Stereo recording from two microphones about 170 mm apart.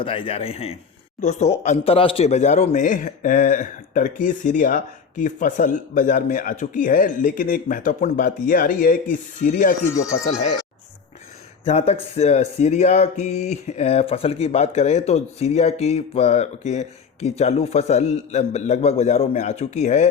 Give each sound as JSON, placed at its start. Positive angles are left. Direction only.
{"t": 0.0, "sound": "a man's voice", "side_deg": 30}
{"t": 11.6, "sound": "speech", "side_deg": 35}